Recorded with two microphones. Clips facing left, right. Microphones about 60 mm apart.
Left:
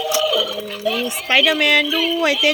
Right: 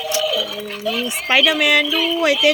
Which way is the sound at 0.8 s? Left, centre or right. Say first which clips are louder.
Left 1 dB; left.